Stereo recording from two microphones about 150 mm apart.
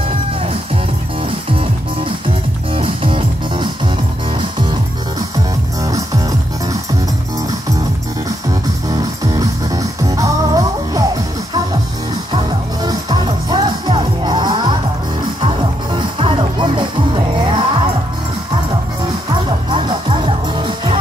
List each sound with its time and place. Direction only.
2.7 s music: 35° right (ahead or behind)
5.8 s music: 25° right (ahead or behind)
8.9 s music: 25° right (ahead or behind)
12.8 s music: 30° right (ahead or behind)
19.7 s music: 30° right (ahead or behind)